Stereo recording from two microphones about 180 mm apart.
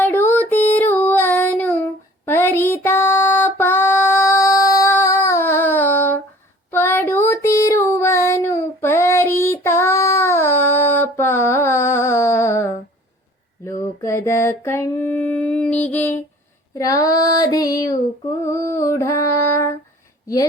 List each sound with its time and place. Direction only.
0.0 s child singing: 10° left (ahead or behind)
13.7 s a sound: 15° left (ahead or behind)
16.7 s child singing: 20° left (ahead or behind)
18.4 s mantra: 15° left (ahead or behind)
18.9 s female singing: 15° left (ahead or behind)